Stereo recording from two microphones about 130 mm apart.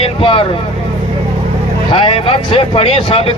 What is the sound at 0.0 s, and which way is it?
Vehicle, 45° left (ahead or behind).